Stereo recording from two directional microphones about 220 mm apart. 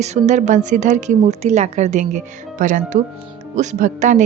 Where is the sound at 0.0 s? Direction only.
30° right (ahead or behind).